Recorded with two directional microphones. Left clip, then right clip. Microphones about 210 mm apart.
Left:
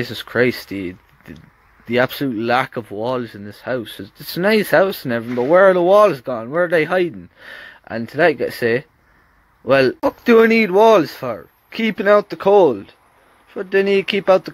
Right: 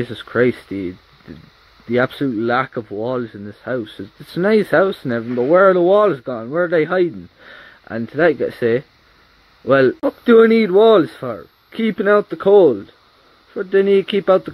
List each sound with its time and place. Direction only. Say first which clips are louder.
0.0 s speech: right 1 dB; 25° left (ahead or behind)